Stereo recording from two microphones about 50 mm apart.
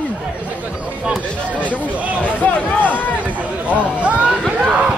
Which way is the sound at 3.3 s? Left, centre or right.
Right.